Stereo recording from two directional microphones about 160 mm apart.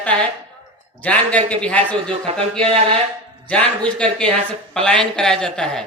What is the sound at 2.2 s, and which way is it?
Speech, 35° right (ahead or behind).